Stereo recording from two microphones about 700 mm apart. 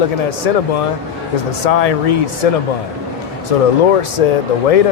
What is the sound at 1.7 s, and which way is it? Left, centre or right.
Speech, left.